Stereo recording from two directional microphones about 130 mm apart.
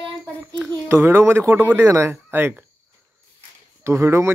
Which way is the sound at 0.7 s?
20° right (ahead or behind).